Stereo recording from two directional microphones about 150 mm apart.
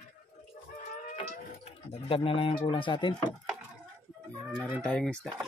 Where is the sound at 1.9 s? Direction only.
35° left (ahead or behind).